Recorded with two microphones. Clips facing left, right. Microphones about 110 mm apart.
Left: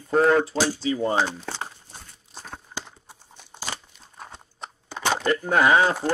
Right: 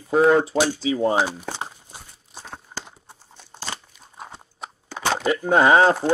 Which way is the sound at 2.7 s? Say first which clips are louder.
Even; 20° right (ahead or behind).